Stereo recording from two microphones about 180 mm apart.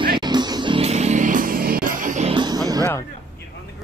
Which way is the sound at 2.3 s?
25° right (ahead or behind).